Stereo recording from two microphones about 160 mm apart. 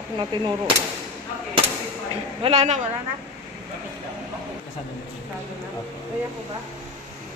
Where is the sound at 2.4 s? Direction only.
40° right (ahead or behind).